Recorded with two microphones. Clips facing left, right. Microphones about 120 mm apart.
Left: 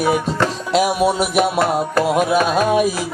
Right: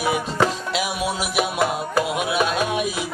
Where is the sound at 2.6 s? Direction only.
45° left (ahead or behind).